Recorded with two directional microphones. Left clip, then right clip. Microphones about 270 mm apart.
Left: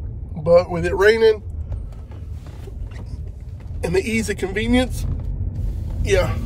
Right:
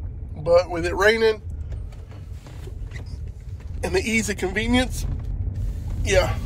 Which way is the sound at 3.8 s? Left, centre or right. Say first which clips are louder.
Left 2 dB; centre.